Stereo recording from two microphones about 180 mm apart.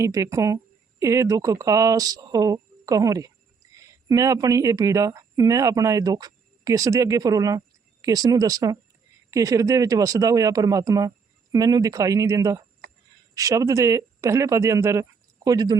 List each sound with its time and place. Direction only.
0.0 s speech: 15° right (ahead or behind)